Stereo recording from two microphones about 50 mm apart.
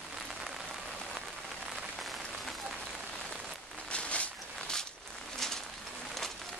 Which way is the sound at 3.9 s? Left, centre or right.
Left.